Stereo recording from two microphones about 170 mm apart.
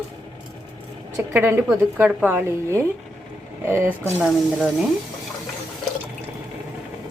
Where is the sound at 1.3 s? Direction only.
15° right (ahead or behind).